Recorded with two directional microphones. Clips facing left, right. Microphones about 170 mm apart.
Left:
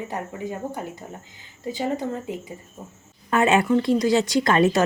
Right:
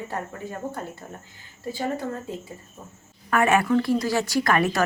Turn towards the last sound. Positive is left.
turn(degrees=25)  # may be behind; listen again after turning